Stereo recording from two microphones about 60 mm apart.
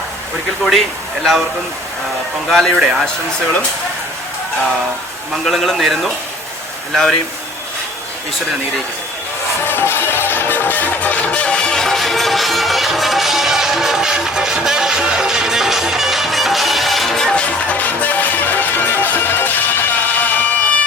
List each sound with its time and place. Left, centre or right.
1.2 s a man's voice: centre
2.5 s a man's voice: centre
5.5 s a man's voice: centre
9.6 s music: left; by 17.4 s centre
17.4 s music: left